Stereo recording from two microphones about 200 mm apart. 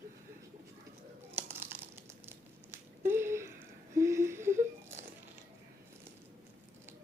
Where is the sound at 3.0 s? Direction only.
10° right (ahead or behind).